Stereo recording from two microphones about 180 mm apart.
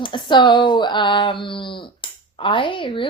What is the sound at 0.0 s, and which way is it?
Speech, 25° left (ahead or behind).